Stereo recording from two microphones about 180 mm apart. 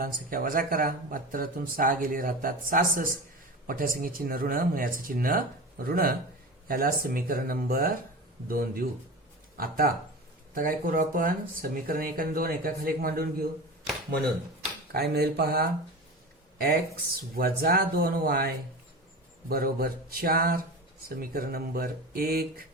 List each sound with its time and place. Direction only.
0.0 s speech: 50° right (ahead or behind)
14.9 s speech: 65° right (ahead or behind)
17.3 s speech: 55° right (ahead or behind)